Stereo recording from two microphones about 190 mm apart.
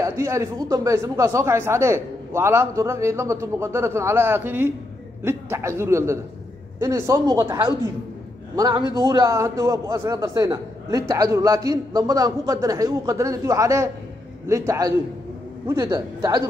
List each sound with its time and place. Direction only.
0.0 s a man's voice: 15° right (ahead or behind)